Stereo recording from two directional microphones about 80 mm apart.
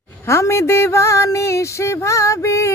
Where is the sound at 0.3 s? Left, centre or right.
Left.